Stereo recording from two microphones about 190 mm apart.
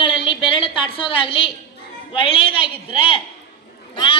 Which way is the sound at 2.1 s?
30° left (ahead or behind).